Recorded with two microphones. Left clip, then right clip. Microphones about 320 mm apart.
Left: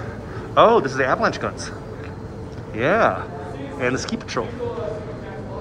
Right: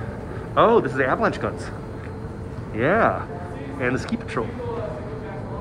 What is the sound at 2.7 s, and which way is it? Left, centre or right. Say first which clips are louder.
Speech: left 1 dB; centre.